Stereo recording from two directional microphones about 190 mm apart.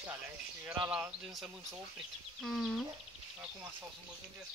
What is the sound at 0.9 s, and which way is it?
Speech, 5° right (ahead or behind).